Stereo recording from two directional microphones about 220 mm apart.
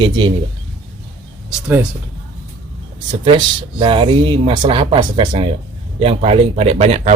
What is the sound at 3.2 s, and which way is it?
Speech, 20° right (ahead or behind).